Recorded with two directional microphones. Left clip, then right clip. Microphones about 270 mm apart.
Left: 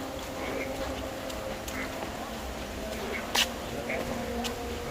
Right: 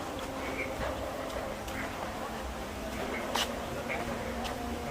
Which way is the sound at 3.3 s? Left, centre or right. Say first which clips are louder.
Left 6 dB; left.